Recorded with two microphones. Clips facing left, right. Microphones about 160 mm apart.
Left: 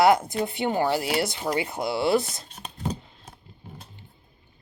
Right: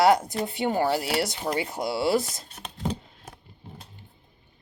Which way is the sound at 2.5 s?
70° right (ahead or behind).